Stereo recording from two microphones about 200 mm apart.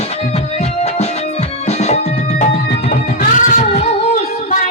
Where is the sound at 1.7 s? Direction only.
35° left (ahead or behind).